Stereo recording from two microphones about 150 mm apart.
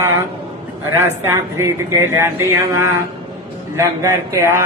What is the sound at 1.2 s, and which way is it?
A man's voice, 20° right (ahead or behind).